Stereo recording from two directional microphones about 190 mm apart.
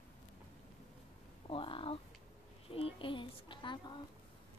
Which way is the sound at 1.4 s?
30° left (ahead or behind).